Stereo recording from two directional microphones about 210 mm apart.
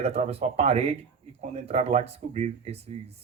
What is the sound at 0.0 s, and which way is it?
Speech, 30° right (ahead or behind).